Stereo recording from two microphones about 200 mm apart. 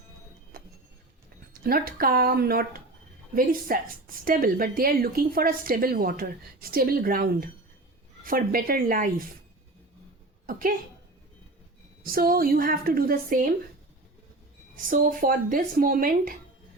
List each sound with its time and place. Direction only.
0.5 s a sound: 45° right (ahead or behind)
1.6 s a woman's voice: 45° right (ahead or behind)
12.0 s a woman's voice: 45° right (ahead or behind)
14.8 s a woman's voice: 45° right (ahead or behind)